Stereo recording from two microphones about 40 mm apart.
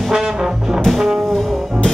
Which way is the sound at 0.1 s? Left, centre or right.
Centre.